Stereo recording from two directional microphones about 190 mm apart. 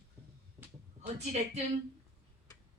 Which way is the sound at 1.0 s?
35° right (ahead or behind).